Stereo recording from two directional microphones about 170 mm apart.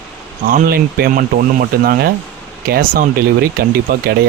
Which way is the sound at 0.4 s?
55° right (ahead or behind).